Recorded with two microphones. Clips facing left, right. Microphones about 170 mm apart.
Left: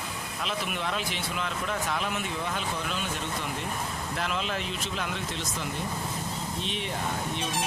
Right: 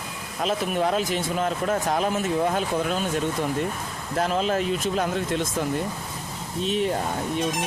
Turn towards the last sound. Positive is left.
turn(degrees=-40)  # may be behind; listen again after turning